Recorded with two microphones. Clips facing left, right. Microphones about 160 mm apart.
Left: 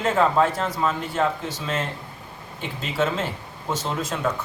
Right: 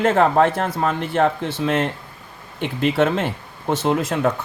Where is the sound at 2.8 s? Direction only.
60° right (ahead or behind).